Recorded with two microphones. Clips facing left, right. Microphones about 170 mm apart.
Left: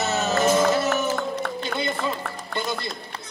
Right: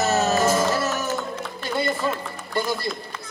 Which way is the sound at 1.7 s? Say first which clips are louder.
Right 6 dB; 60° left (ahead or behind).